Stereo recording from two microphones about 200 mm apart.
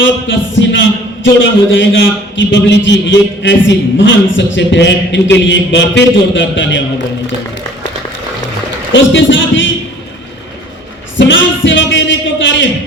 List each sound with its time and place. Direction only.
0.0 s a man's voice: 70° left (ahead or behind)
8.9 s a man's voice: 70° left (ahead or behind)
11.2 s a sound: 70° left (ahead or behind)